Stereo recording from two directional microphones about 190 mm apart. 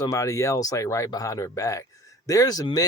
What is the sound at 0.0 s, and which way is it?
Speech, 15° left (ahead or behind).